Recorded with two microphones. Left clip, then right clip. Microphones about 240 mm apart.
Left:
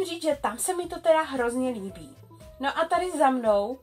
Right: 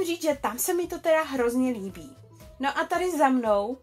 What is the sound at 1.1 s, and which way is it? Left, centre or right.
A woman's voice, right.